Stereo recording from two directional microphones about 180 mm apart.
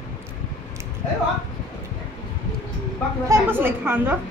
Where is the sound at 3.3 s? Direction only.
10° right (ahead or behind).